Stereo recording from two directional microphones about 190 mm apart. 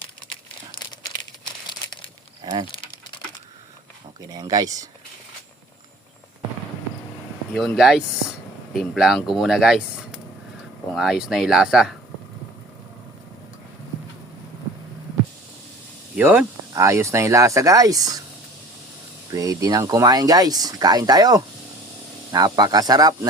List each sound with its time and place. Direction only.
2.4 s speech: 25° right (ahead or behind)
4.3 s speech: 20° right (ahead or behind)
7.8 s speech: centre (ahead or behind)
16.1 s speech: 5° right (ahead or behind)
19.3 s speech: 15° right (ahead or behind)